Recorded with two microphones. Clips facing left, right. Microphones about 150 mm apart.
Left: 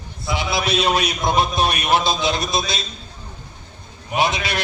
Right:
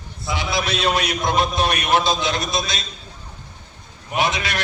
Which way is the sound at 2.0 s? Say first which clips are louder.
Left 1 dB; 30° left (ahead or behind).